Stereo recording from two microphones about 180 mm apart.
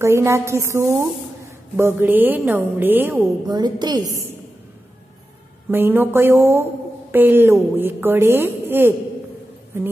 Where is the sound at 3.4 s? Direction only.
20° right (ahead or behind).